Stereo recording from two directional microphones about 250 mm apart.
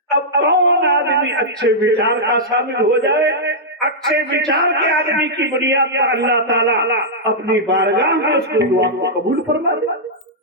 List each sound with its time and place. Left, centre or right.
0.1 s speech: right